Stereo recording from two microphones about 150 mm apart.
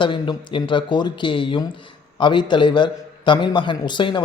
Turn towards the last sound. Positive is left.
turn(degrees=30)  # may be behind; listen again after turning